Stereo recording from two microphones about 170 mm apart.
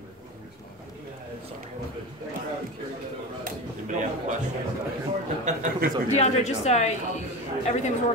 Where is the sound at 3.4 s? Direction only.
50° right (ahead or behind).